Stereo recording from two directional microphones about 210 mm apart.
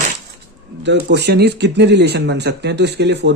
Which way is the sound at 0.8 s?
55° right (ahead or behind).